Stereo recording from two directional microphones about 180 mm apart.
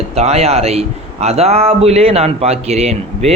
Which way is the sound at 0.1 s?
35° right (ahead or behind).